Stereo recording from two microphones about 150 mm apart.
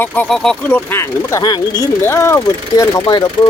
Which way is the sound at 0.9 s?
20° left (ahead or behind).